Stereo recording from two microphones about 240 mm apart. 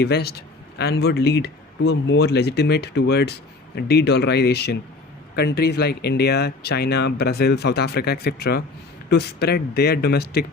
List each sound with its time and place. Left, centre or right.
0.0 s speech: left